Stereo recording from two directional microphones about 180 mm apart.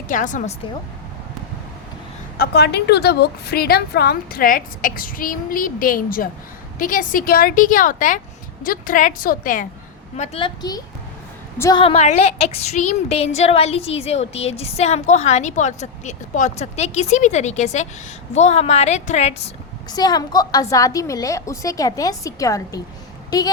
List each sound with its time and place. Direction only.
0.1 s a woman's voice: 45° left (ahead or behind)
2.4 s a woman's voice: 65° left (ahead or behind); by 9.6 s 50° left (ahead or behind)
10.2 s a woman's voice: 30° left (ahead or behind)
11.8 s a woman's voice: 35° left (ahead or behind)
19.9 s a woman's voice: 20° left (ahead or behind)